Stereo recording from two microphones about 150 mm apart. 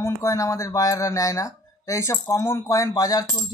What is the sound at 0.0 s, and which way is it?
Speech, 20° left (ahead or behind).